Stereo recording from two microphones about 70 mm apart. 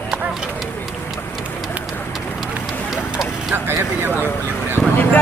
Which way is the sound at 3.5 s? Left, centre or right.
Right.